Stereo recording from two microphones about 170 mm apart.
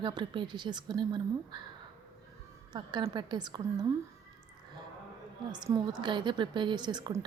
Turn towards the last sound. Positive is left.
turn(degrees=-25)  # may be behind; listen again after turning